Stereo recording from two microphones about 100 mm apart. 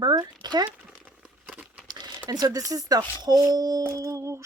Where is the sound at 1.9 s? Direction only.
40° right (ahead or behind).